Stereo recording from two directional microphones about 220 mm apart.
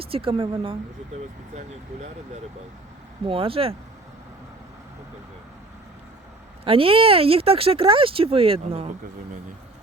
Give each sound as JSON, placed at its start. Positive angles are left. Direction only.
{"t": 0.0, "sound": "speech", "side_deg": -25}
{"t": 3.2, "sound": "speech", "side_deg": -25}
{"t": 6.7, "sound": "speech", "side_deg": -25}